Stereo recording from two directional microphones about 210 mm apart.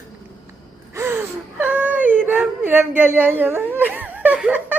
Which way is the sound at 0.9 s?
10° right (ahead or behind).